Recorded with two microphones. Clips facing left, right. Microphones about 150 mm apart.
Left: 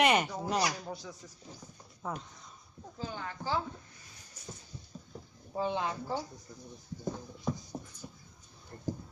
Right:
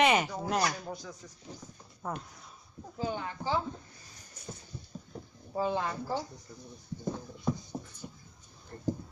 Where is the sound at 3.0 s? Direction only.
10° right (ahead or behind).